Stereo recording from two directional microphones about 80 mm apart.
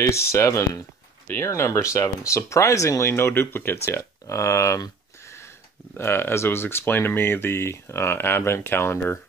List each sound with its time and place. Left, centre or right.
0.0 s speech: left
1.2 s speech: left
1.5 s speech: left
5.9 s speech: left